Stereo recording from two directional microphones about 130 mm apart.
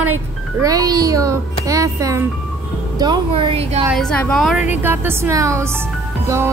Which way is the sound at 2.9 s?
35° right (ahead or behind).